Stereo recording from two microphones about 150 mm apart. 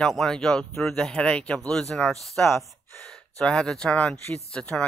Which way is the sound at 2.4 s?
15° left (ahead or behind).